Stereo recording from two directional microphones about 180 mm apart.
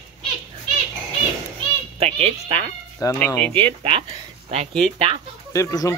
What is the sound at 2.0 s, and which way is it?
Speech, 35° right (ahead or behind).